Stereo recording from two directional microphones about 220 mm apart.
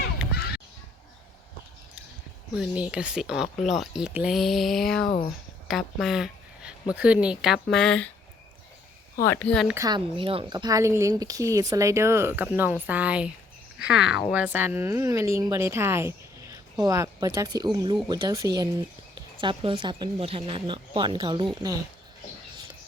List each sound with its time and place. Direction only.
0.3 s crow: 45° left (ahead or behind)
2.6 s speech: 5° right (ahead or behind)
9.2 s speech: 10° left (ahead or behind)
9.6 s speech: 15° right (ahead or behind)